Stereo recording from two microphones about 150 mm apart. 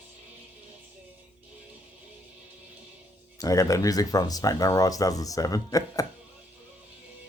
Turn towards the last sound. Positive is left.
turn(degrees=25)  # may be behind; listen again after turning